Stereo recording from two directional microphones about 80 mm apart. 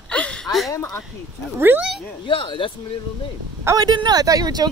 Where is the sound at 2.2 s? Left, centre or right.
Left.